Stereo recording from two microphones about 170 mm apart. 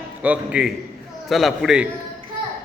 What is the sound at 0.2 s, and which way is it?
A man's voice, 5° right (ahead or behind).